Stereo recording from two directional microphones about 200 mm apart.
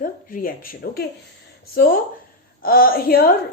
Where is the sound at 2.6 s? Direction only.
45° left (ahead or behind).